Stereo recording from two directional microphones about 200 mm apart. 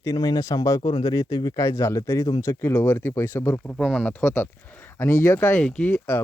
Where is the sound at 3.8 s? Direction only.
Centre (ahead or behind).